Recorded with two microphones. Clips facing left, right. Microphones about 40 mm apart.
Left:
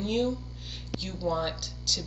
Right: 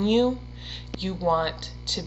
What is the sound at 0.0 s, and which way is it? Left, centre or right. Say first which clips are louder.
Speech: right 7 dB; right.